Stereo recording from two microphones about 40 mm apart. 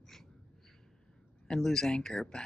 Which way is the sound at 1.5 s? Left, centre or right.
Centre.